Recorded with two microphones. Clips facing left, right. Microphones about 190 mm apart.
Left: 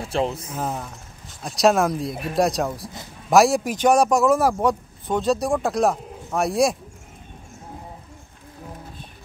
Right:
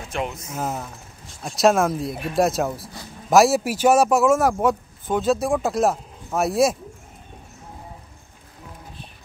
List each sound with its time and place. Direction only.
0.0 s speech: 30° left (ahead or behind)
0.6 s a man's voice: centre (ahead or behind)